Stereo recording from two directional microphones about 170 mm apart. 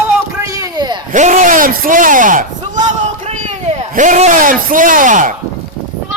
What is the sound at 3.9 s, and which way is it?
Speech, 50° right (ahead or behind).